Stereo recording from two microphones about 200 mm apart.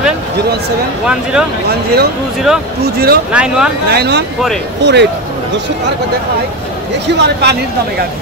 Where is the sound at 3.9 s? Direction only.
55° right (ahead or behind).